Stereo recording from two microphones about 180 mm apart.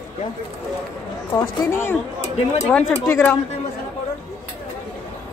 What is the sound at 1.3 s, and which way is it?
Speech, 15° left (ahead or behind).